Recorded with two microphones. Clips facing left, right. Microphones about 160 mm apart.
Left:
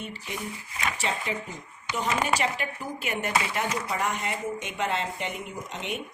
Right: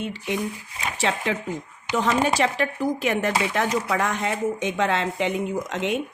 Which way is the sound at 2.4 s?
90° right.